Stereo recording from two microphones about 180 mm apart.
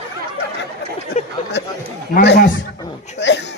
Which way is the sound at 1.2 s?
40° left (ahead or behind).